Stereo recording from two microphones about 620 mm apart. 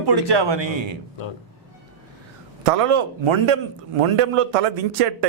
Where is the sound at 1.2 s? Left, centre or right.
Left.